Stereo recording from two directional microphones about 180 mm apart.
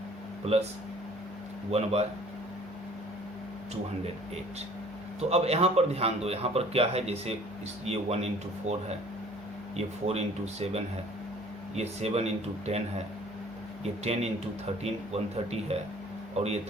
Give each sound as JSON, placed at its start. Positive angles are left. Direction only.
{"t": 0.5, "sound": "a man's voice", "side_deg": -35}
{"t": 1.7, "sound": "a man's voice", "side_deg": -35}
{"t": 5.3, "sound": "a man's voice", "side_deg": -35}
{"t": 13.8, "sound": "a man's voice", "side_deg": -35}